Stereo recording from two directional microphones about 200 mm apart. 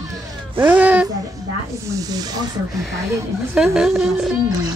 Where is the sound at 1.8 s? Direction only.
20° right (ahead or behind).